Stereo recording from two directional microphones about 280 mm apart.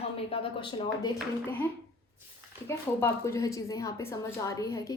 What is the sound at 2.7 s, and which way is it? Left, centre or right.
A woman's voice, centre.